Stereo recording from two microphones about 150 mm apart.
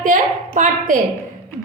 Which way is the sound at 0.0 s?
55° right (ahead or behind).